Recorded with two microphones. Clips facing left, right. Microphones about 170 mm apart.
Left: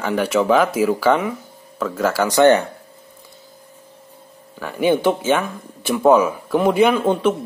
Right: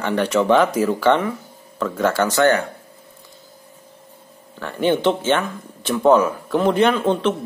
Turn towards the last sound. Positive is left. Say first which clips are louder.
# left 2 dB
turn(degrees=10)  # may be behind; listen again after turning